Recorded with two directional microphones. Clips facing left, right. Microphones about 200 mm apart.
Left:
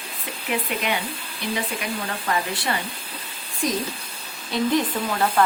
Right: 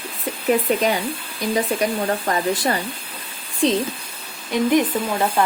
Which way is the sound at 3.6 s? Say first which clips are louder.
Right 7 dB; 30° right (ahead or behind).